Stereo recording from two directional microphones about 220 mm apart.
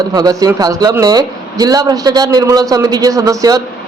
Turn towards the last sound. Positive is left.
turn(degrees=-15)  # may be behind; listen again after turning